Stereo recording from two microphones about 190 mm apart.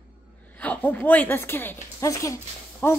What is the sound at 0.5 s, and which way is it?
A woman's voice, 10° left (ahead or behind).